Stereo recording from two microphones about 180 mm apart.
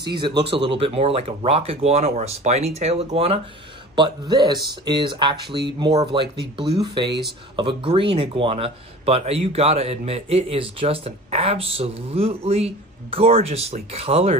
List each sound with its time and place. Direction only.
0.0 s speech: 25° right (ahead or behind)
3.9 s speech: 25° right (ahead or behind)